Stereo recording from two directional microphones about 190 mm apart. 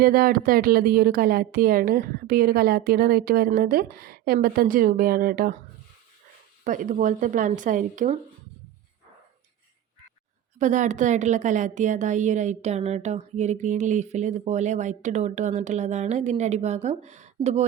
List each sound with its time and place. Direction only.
0.0 s speech: 50° right (ahead or behind)
6.7 s speech: 45° right (ahead or behind)
10.6 s a woman's voice: 40° right (ahead or behind)